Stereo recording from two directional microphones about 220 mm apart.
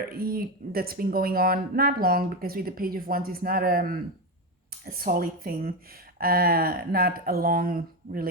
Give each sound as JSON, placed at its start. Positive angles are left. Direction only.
{"t": 0.1, "sound": "speech", "side_deg": -40}